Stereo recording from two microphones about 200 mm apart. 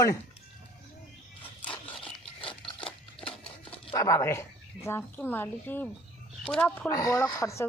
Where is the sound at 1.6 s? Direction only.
5° left (ahead or behind).